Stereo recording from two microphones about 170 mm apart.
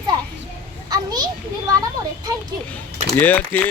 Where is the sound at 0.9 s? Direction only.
25° right (ahead or behind).